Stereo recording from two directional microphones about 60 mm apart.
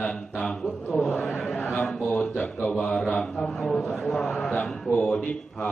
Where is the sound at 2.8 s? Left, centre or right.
Centre.